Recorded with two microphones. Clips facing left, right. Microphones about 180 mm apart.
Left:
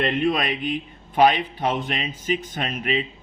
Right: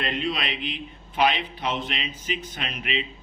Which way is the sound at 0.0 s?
50° left (ahead or behind).